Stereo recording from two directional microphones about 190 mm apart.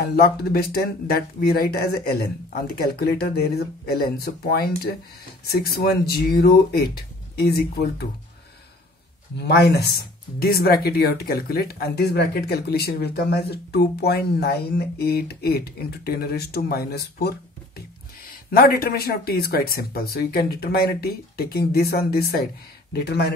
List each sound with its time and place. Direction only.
0.0 s speech: 55° left (ahead or behind)
9.4 s speech: 60° left (ahead or behind)
18.3 s speech: 50° left (ahead or behind)